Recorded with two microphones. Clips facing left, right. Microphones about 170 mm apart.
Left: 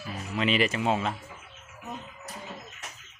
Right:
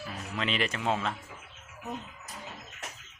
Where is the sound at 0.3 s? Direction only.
5° left (ahead or behind).